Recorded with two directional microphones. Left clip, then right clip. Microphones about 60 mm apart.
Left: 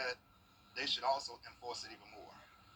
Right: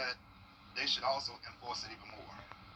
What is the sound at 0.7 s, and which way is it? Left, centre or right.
Speech, left.